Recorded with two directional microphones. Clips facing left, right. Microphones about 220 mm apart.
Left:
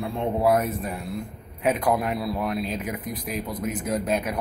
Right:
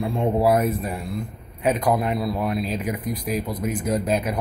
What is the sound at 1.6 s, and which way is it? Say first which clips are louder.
A man's voice: right 2 dB; 5° left (ahead or behind).